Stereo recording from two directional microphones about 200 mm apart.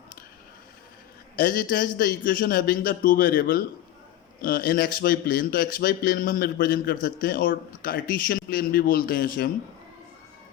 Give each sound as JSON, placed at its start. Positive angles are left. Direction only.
{"t": 1.4, "sound": "a man's voice", "side_deg": 45}